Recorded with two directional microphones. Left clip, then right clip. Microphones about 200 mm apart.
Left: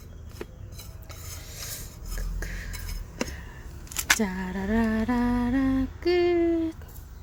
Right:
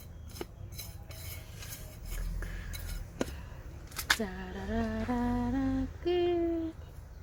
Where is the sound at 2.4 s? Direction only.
25° left (ahead or behind).